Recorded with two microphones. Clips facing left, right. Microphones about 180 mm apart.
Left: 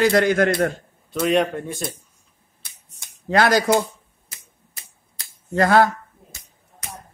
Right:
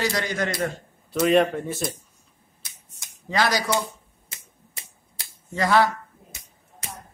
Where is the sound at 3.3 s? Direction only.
55° left (ahead or behind).